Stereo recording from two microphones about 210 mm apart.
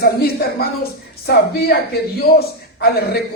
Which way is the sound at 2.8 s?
50° left (ahead or behind).